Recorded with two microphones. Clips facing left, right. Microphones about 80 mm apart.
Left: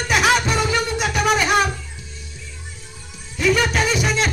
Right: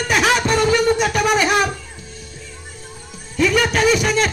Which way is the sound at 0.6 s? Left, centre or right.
Centre.